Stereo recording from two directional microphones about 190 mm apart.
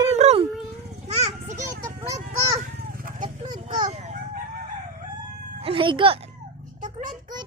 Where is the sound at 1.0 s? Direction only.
35° right (ahead or behind).